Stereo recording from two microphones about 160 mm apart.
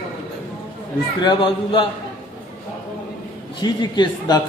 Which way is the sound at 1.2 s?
30° left (ahead or behind).